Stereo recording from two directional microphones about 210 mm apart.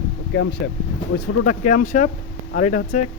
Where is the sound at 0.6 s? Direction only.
55° left (ahead or behind).